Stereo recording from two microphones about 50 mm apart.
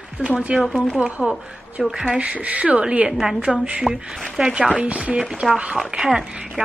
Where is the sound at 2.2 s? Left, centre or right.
Right.